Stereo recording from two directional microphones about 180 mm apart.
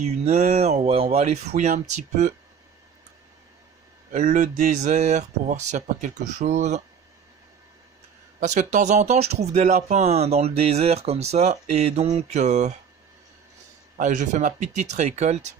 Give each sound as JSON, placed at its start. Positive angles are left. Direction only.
{"t": 0.1, "sound": "speech", "side_deg": -35}
{"t": 4.1, "sound": "speech", "side_deg": -50}
{"t": 8.4, "sound": "speech", "side_deg": -45}
{"t": 13.9, "sound": "speech", "side_deg": -45}